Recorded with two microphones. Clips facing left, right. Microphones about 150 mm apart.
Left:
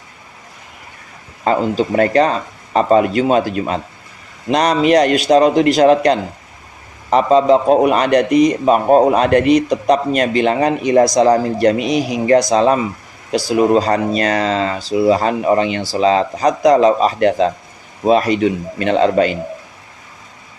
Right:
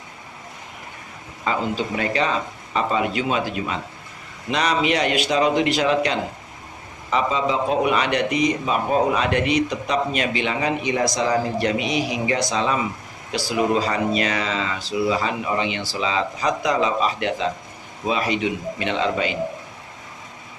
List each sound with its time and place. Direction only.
1.5 s a man's voice: 45° left (ahead or behind)